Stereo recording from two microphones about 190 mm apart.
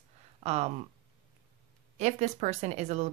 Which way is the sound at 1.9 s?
35° right (ahead or behind).